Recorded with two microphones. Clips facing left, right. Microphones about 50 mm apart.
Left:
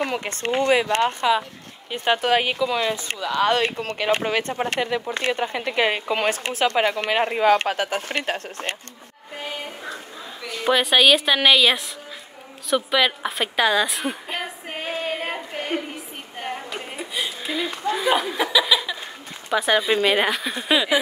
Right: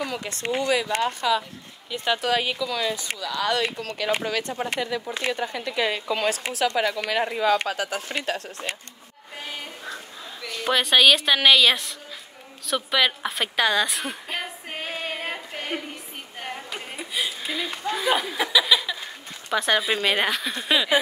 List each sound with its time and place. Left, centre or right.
0.0 s speech: left
1.0 s speech: left
10.4 s a woman's voice: centre
12.6 s a sound: centre
19.5 s a woman's voice: centre